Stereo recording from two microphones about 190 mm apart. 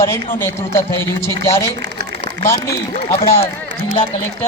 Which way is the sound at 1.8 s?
60° right (ahead or behind).